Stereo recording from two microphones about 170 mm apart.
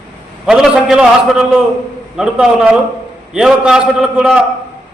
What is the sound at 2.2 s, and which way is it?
A man's voice, 5° right (ahead or behind).